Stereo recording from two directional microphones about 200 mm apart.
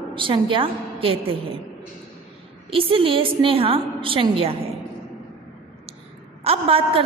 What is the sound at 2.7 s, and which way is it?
A woman's voice, 25° right (ahead or behind).